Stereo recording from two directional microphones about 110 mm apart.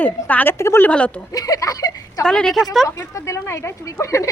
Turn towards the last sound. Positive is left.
turn(degrees=25)  # may be behind; listen again after turning